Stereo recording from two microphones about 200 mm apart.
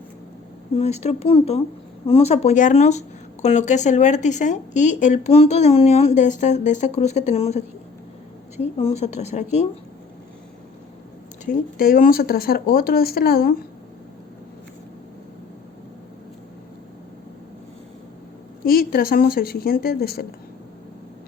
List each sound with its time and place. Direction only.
0.8 s speech: 35° left (ahead or behind)
11.4 s speech: 45° left (ahead or behind)
18.6 s speech: 50° left (ahead or behind)